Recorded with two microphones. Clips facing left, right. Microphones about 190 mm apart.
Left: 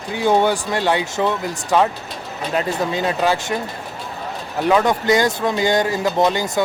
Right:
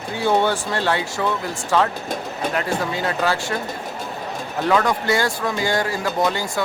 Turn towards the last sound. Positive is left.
turn(degrees=20)  # may be behind; listen again after turning